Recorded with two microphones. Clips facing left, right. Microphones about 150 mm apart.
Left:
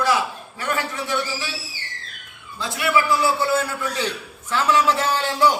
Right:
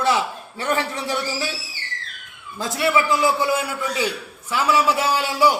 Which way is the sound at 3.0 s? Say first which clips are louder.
Left 1 dB; 15° right (ahead or behind).